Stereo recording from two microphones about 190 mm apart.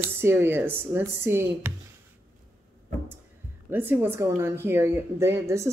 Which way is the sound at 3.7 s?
10° right (ahead or behind).